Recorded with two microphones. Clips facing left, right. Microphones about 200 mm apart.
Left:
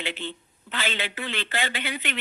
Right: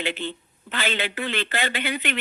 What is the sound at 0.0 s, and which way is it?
Speech, 60° right (ahead or behind).